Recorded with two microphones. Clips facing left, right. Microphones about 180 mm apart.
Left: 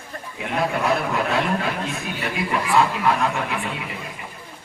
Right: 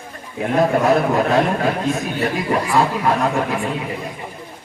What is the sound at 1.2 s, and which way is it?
A man's voice, 40° right (ahead or behind).